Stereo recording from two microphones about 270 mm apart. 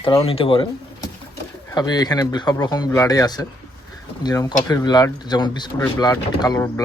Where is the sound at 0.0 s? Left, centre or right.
Centre.